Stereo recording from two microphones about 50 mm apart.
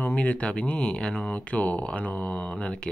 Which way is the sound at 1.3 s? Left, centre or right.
Left.